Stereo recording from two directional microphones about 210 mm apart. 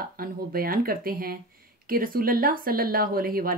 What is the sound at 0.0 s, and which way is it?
A woman's voice, 45° right (ahead or behind).